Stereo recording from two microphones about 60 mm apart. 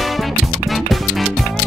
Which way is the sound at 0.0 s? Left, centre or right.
Centre.